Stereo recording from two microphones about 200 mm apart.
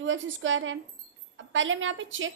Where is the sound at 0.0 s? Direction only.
70° right (ahead or behind).